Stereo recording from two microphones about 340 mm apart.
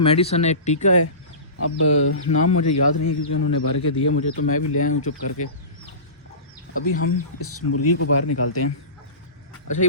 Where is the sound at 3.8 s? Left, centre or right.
Left.